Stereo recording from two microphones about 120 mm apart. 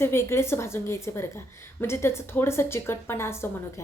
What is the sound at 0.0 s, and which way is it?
A woman's voice, 20° left (ahead or behind).